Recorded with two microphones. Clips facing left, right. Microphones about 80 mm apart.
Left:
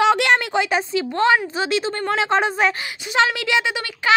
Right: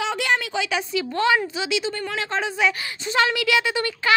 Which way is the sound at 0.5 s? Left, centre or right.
Left.